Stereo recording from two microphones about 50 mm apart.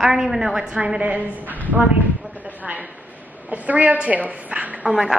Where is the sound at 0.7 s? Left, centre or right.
Right.